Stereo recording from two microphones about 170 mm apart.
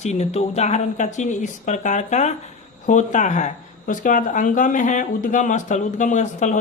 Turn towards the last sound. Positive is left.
turn(degrees=45)  # may be behind; listen again after turning